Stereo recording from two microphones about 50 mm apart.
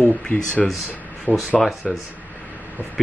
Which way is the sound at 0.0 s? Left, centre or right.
Left.